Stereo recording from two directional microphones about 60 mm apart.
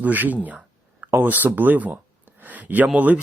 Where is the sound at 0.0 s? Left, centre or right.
Right.